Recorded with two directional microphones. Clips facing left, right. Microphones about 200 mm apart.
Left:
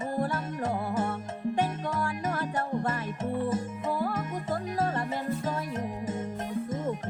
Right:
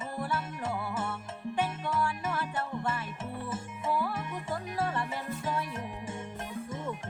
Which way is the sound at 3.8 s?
40° left (ahead or behind).